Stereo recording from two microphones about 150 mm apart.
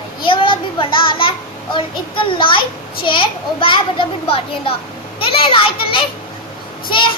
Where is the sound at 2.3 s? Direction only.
35° left (ahead or behind).